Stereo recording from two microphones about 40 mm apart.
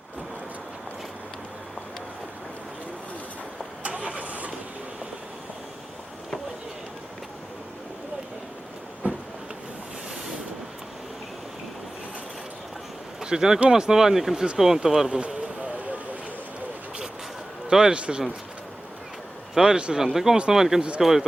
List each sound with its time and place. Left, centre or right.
3.8 s vehicle: right
9.0 s a sound: right
13.2 s speech: centre
15.1 s a sound: right
17.7 s speech: centre
17.9 s speech: right
19.5 s speech: centre
20.1 s speech: centre